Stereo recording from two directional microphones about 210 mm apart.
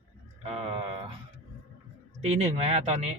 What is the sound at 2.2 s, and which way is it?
Speech, 30° right (ahead or behind).